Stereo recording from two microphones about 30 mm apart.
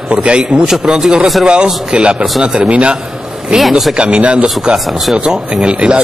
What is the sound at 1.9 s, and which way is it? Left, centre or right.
Speech, right.